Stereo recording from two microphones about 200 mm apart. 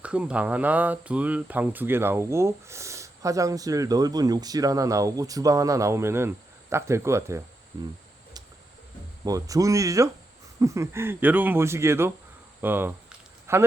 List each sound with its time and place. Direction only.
0.0 s speech: 5° right (ahead or behind)
9.2 s speech: 15° right (ahead or behind)
12.6 s a sound: 10° right (ahead or behind)